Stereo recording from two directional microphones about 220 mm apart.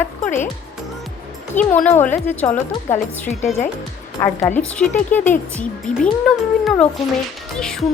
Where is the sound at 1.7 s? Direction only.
10° left (ahead or behind).